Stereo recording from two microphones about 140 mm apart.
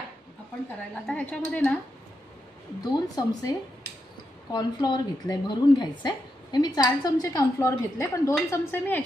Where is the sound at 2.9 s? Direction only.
30° left (ahead or behind).